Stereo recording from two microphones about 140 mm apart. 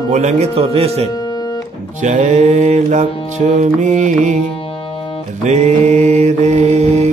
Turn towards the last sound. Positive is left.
turn(degrees=-50)  # may be behind; listen again after turning